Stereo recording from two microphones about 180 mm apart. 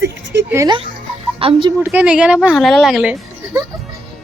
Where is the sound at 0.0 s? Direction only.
70° right (ahead or behind).